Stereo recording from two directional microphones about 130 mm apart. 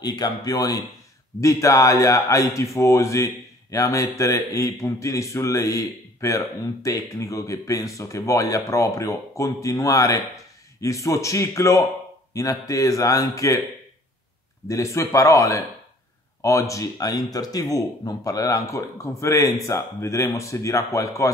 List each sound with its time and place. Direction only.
0.0 s a man's voice: 30° left (ahead or behind)
14.7 s a man's voice: 20° left (ahead or behind)